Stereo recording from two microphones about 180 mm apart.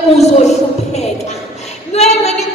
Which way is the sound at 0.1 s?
35° left (ahead or behind).